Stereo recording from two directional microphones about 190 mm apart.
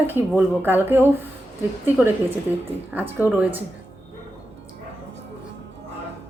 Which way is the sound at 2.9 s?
10° right (ahead or behind).